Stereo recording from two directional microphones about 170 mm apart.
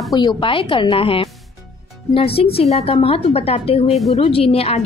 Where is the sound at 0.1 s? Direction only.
25° left (ahead or behind).